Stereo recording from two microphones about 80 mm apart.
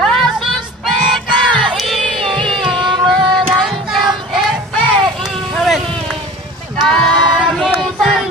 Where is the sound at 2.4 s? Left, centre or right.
Right.